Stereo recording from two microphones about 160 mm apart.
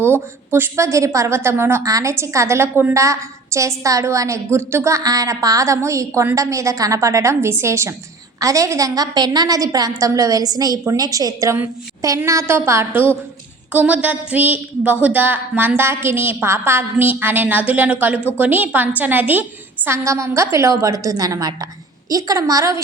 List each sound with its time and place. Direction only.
0.0 s a woman's voice: 15° right (ahead or behind)